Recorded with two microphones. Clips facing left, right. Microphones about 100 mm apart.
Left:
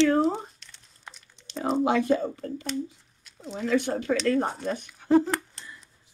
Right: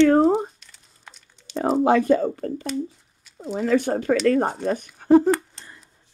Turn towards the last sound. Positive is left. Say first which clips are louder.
# right 7 dB
turn(degrees=-45)  # may be behind; listen again after turning